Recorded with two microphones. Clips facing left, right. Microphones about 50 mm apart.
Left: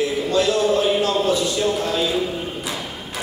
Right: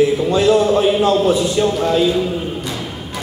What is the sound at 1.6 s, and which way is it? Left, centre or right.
Speech, centre.